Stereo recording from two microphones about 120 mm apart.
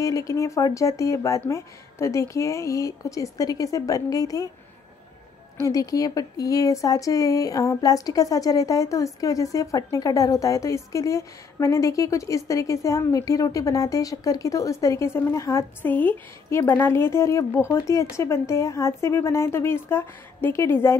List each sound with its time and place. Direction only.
0.0 s speech: 30° left (ahead or behind)
5.6 s speech: 30° left (ahead or behind)
15.8 s speech: 15° left (ahead or behind)